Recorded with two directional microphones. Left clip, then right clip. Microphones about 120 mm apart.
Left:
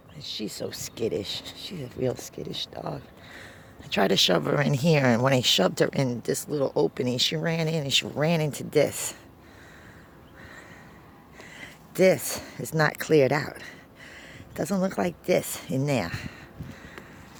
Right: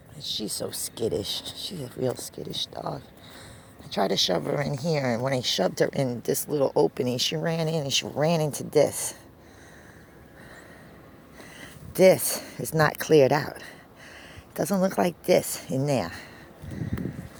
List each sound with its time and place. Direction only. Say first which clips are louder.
0.2 s speech: right 2 dB; 20° left (ahead or behind)
0.8 s speech: even; 30° left (ahead or behind)
2.1 s speech: right 1 dB; 35° left (ahead or behind)
3.9 s speech: left 2 dB; 45° left (ahead or behind)
4.5 s speech: left 4 dB; 60° left (ahead or behind); by 6.1 s 30° left (ahead or behind)
6.2 s speech: right 2 dB; 10° left (ahead or behind)
7.0 s speech: left 1 dB; 20° left (ahead or behind)
11.6 s speech: right 3 dB; 5° left (ahead or behind)
15.4 s speech: right 1 dB; 15° left (ahead or behind)